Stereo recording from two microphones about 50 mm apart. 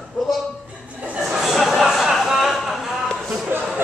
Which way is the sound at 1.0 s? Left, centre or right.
Right.